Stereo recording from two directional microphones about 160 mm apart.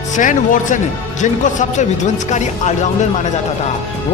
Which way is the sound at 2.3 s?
45° left (ahead or behind).